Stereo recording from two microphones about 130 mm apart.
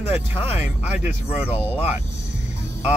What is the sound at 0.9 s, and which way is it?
Speech, 10° right (ahead or behind).